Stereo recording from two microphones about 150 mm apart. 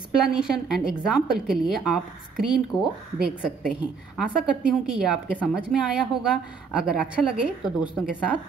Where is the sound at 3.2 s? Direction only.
5° right (ahead or behind).